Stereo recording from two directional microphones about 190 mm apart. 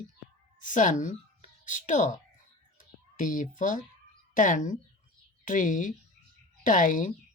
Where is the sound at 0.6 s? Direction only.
40° left (ahead or behind).